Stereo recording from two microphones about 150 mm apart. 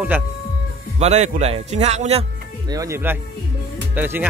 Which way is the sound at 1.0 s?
50° right (ahead or behind).